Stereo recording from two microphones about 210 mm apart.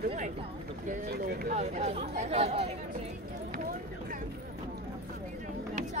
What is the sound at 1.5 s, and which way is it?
Speech, 30° right (ahead or behind).